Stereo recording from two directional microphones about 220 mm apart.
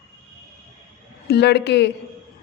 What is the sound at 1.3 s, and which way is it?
Speech, 50° left (ahead or behind).